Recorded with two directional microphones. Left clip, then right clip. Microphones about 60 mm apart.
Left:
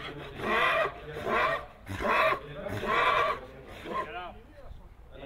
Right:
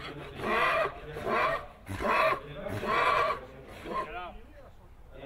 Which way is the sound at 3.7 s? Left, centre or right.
Centre.